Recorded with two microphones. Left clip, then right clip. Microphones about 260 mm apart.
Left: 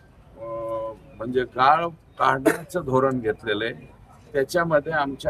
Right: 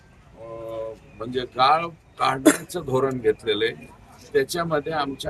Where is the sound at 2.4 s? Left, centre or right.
Right.